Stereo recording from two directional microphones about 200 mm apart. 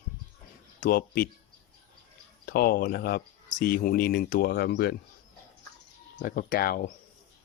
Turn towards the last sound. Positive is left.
turn(degrees=50)  # may be behind; listen again after turning